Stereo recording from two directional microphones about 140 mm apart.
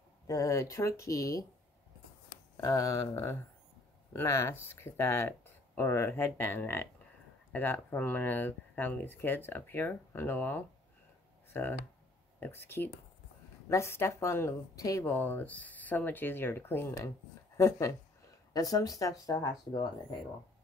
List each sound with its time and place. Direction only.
0.3 s speech: 25° left (ahead or behind)
2.5 s speech: 25° left (ahead or behind)